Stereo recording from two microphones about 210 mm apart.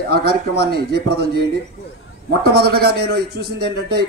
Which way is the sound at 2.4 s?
50° right (ahead or behind).